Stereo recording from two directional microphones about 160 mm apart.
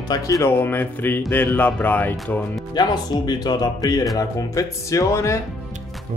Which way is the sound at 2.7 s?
25° left (ahead or behind).